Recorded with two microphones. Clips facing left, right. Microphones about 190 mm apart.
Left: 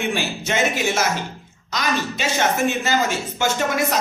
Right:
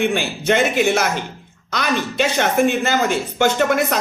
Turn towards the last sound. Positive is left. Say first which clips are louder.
# right 4 dB
turn(degrees=-55)  # may be behind; listen again after turning